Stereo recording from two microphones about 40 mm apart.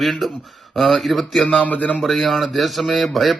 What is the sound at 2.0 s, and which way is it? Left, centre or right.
Speech, centre.